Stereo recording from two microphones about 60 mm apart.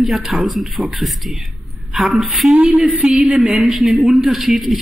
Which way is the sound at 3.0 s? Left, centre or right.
Centre.